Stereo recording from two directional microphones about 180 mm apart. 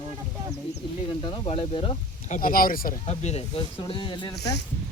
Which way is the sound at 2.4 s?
50° left (ahead or behind).